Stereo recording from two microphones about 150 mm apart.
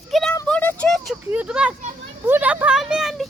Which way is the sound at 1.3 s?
10° right (ahead or behind).